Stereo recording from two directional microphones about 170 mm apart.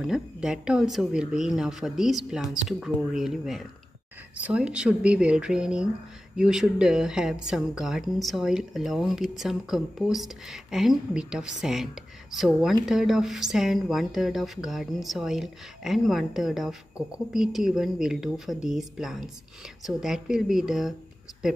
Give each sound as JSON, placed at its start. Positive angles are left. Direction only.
{"t": 0.0, "sound": "a woman's voice", "side_deg": -5}